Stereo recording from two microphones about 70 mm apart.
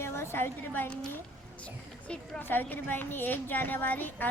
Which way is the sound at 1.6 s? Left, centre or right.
Centre.